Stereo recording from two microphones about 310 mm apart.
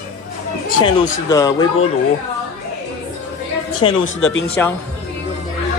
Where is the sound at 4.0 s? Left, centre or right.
Left.